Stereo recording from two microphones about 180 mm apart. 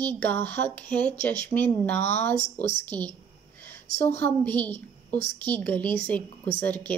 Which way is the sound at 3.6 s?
10° left (ahead or behind).